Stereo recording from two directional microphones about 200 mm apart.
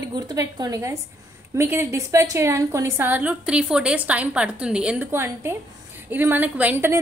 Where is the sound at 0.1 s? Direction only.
20° right (ahead or behind).